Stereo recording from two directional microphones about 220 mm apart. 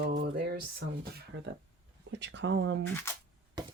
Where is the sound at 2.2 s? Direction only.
55° right (ahead or behind).